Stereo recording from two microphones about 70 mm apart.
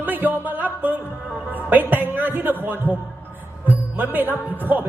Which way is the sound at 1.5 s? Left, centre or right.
Right.